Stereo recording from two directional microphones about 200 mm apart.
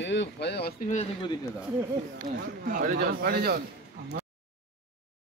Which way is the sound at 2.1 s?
45° right (ahead or behind).